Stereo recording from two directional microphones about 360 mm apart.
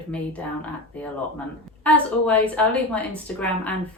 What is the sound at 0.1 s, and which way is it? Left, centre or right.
A woman's voice, centre.